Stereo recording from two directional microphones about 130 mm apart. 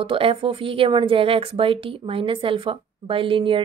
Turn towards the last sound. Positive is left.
turn(degrees=-40)  # may be behind; listen again after turning